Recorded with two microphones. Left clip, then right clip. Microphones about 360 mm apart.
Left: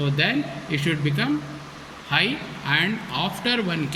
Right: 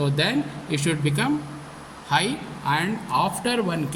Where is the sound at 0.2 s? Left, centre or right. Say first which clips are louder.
Left 1 dB; right.